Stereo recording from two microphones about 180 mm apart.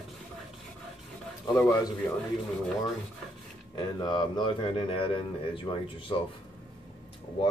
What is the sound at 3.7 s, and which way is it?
Speech, 25° left (ahead or behind).